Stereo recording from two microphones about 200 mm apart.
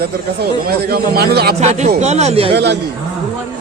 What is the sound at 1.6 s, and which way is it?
Speech, 30° right (ahead or behind).